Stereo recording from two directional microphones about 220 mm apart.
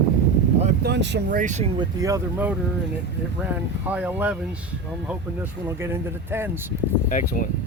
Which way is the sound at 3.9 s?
5° right (ahead or behind).